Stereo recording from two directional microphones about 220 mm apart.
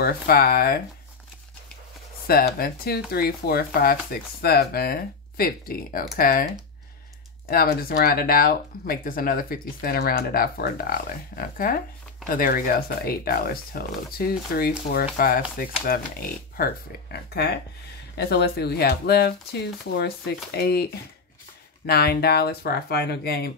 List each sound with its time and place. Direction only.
0.0 s speech: 45° left (ahead or behind)
2.2 s speech: 45° left (ahead or behind)